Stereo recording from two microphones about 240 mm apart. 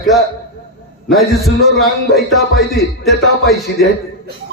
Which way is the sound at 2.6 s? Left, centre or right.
Centre.